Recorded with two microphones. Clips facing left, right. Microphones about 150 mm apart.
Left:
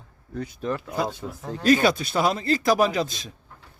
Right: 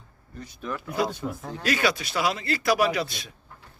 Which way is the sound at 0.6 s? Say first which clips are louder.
Even; 30° left (ahead or behind).